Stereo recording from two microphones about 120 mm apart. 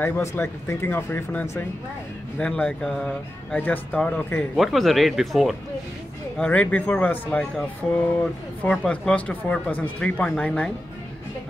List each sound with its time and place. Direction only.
0.0 s speech: 20° left (ahead or behind)
4.6 s speech: centre (ahead or behind)
6.3 s speech: 10° left (ahead or behind)